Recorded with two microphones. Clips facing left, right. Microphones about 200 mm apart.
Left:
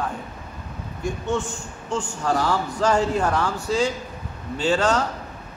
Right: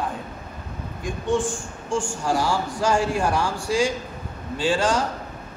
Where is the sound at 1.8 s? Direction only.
10° right (ahead or behind).